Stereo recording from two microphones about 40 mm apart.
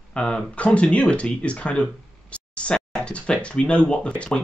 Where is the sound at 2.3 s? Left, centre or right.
Left.